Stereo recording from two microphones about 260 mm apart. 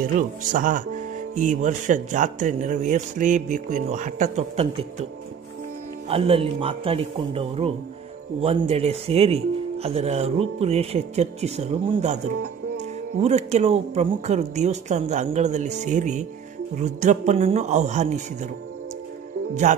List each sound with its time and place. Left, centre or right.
0.0 s speech: right
6.0 s speech: right